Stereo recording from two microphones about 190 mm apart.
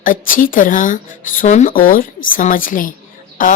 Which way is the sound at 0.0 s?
45° left (ahead or behind).